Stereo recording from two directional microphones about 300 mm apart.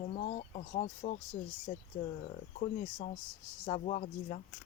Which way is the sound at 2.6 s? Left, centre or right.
Left.